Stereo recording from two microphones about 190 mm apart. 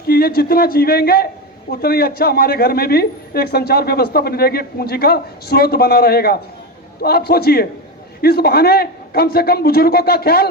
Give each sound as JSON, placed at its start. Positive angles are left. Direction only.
{"t": 0.1, "sound": "a man's voice", "side_deg": 50}